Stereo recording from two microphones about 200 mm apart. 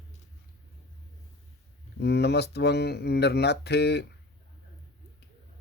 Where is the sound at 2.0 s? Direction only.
55° left (ahead or behind).